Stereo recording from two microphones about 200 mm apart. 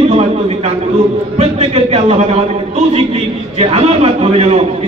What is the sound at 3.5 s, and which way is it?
A man's voice, 30° right (ahead or behind).